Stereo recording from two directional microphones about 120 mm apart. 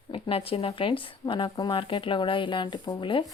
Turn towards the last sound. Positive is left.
turn(degrees=40)  # may be behind; listen again after turning